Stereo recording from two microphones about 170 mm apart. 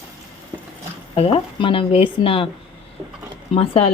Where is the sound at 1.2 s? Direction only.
35° left (ahead or behind).